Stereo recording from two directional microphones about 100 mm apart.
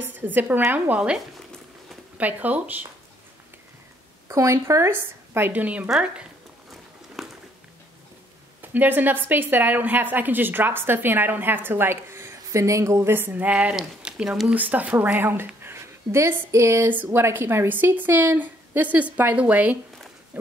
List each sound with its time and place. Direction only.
0.0 s a woman's voice: 20° right (ahead or behind)
4.3 s a woman's voice: 30° right (ahead or behind); by 6.2 s 5° right (ahead or behind)
7.2 s a sound: centre (ahead or behind)
8.5 s a woman's voice: 20° right (ahead or behind)